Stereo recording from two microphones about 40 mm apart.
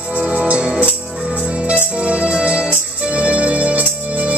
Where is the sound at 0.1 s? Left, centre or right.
Right.